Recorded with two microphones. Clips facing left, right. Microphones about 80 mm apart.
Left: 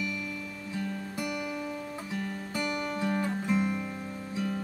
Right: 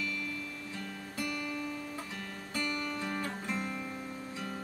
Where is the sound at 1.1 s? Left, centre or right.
Centre.